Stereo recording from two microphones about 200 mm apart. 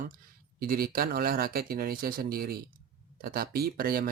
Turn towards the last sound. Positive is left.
turn(degrees=-50)  # may be behind; listen again after turning